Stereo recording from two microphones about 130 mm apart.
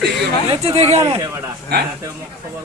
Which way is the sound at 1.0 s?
25° right (ahead or behind).